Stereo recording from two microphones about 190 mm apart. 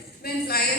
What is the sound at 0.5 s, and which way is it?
Speech, 55° left (ahead or behind).